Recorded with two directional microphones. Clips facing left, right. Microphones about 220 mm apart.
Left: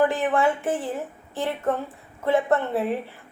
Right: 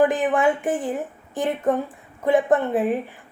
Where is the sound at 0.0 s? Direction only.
15° right (ahead or behind).